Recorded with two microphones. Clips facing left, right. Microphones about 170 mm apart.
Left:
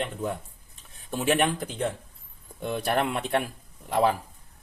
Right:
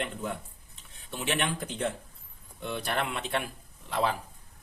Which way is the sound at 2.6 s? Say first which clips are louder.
Left 6 dB; 45° left (ahead or behind).